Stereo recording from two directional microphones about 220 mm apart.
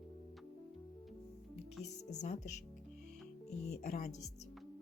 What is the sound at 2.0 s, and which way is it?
Speech, 30° left (ahead or behind).